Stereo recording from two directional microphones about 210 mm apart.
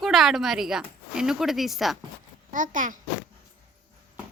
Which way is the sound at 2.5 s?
35° right (ahead or behind).